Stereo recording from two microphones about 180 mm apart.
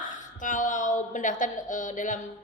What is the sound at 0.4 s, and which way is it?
A woman's voice, 45° left (ahead or behind).